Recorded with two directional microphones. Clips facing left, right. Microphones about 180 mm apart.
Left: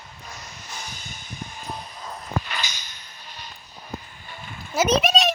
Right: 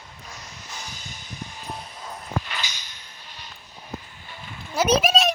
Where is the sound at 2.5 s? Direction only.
45° left (ahead or behind).